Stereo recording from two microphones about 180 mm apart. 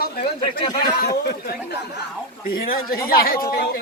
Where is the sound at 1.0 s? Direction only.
60° left (ahead or behind).